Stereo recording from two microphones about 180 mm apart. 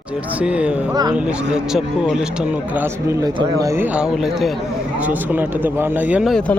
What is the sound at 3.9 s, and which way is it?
A man's voice, 5° right (ahead or behind).